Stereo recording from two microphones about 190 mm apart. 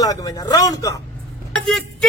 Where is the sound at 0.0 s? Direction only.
20° left (ahead or behind).